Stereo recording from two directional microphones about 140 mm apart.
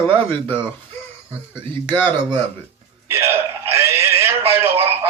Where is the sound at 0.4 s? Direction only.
15° left (ahead or behind).